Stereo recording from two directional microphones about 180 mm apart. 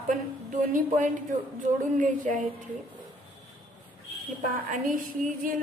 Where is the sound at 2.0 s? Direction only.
45° right (ahead or behind).